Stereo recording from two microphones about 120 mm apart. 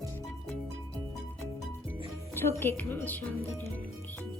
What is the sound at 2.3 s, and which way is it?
Speech, 20° left (ahead or behind).